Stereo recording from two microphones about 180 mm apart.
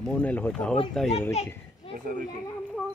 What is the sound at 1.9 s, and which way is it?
Speech, 50° right (ahead or behind).